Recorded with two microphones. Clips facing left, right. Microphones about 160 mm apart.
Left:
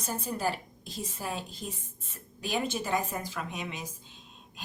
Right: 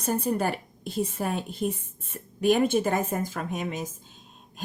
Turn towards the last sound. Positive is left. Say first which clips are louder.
# right 7 dB
turn(degrees=-45)  # may be behind; listen again after turning